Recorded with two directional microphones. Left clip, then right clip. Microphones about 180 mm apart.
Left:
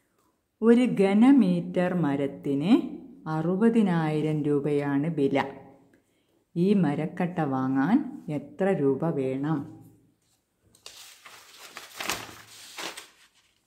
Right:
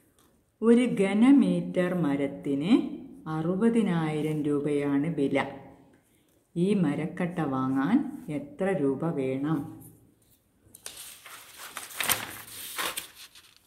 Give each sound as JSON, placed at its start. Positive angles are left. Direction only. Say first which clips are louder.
{"t": 0.6, "sound": "speech", "louder": "left 2 dB", "side_deg": 40}
{"t": 6.5, "sound": "speech", "louder": "left 2 dB", "side_deg": 40}